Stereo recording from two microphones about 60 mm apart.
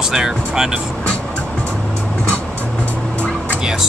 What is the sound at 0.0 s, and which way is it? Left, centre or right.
Speech, centre.